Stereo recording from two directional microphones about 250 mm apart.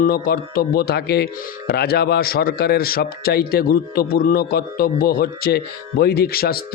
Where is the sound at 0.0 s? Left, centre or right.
Left.